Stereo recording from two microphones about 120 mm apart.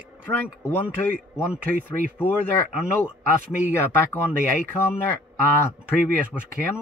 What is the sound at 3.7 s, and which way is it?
Speech, 20° left (ahead or behind).